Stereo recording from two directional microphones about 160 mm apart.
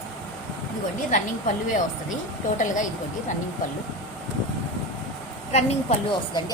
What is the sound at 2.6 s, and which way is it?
Speech, 50° left (ahead or behind).